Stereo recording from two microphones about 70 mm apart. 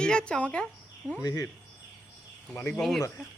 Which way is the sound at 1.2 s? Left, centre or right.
Left.